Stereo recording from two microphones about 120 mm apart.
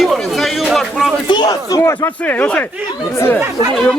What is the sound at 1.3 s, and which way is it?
Speech, 40° left (ahead or behind).